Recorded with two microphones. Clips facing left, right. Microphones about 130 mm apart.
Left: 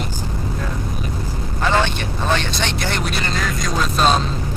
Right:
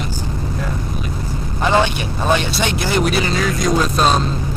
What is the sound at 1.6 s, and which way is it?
Speech, 15° right (ahead or behind).